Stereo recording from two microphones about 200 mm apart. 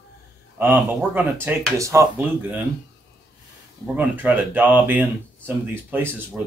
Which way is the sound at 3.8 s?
10° right (ahead or behind).